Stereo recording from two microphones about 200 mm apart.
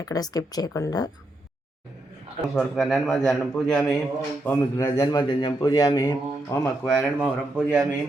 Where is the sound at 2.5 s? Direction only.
Centre (ahead or behind).